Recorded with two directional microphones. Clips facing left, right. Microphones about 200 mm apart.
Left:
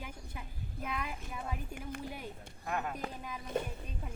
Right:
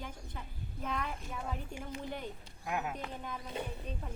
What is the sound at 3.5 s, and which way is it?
Speech, 50° left (ahead or behind).